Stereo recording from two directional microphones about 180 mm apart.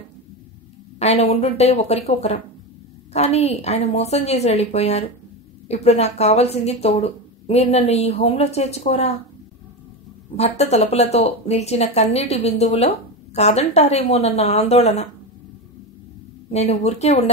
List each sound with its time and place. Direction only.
0.9 s speech: 35° left (ahead or behind)
10.3 s speech: 35° left (ahead or behind)
16.4 s speech: 35° left (ahead or behind)